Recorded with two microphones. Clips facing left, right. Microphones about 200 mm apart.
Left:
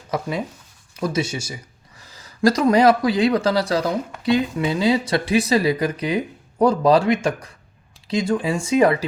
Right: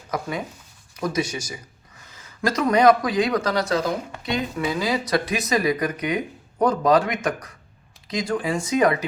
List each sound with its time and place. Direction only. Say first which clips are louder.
0.1 s a man's voice: left 3 dB; 30° left (ahead or behind)